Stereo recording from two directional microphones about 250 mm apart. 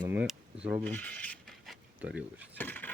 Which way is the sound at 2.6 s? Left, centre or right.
Centre.